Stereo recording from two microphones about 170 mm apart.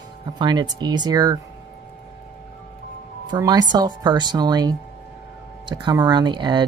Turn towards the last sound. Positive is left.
turn(degrees=-25)  # may be behind; listen again after turning